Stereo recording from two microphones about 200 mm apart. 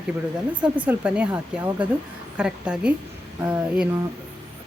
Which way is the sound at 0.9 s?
5° right (ahead or behind).